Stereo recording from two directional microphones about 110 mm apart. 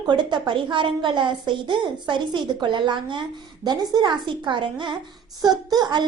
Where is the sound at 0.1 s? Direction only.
45° right (ahead or behind).